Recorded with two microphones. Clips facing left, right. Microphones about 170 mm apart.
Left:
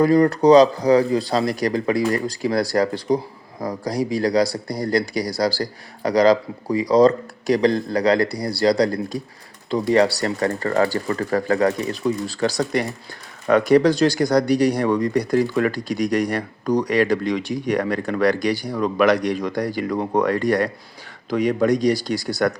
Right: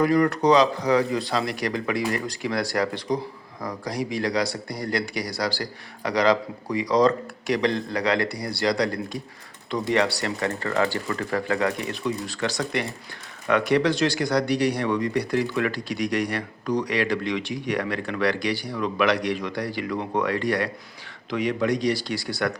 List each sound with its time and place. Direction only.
0.0 s speech: 35° left (ahead or behind)